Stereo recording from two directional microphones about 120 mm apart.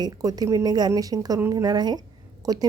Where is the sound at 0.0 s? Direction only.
30° right (ahead or behind).